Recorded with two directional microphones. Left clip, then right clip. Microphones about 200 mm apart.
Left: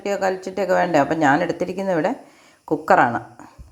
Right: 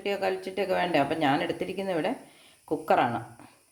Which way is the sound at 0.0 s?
20° left (ahead or behind).